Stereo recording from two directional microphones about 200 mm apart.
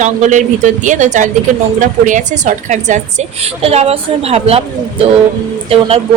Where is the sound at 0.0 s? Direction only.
40° right (ahead or behind).